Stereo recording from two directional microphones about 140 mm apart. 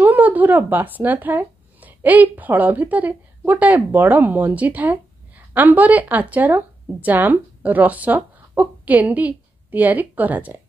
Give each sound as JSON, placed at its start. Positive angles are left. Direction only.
{"t": 0.0, "sound": "speech", "side_deg": -10}